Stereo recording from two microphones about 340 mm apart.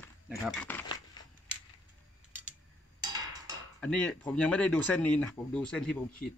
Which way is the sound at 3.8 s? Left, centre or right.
Centre.